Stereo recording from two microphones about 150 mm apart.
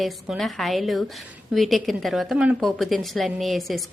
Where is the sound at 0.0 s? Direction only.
Centre (ahead or behind).